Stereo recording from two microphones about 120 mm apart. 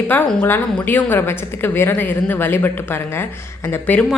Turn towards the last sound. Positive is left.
turn(degrees=15)  # may be behind; listen again after turning